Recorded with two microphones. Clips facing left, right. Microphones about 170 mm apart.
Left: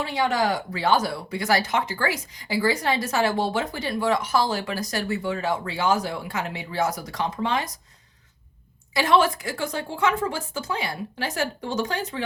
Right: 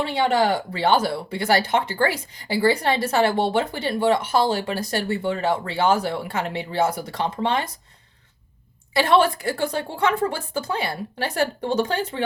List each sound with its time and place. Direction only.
0.0 s speech: 30° right (ahead or behind)
9.1 s speech: 30° right (ahead or behind)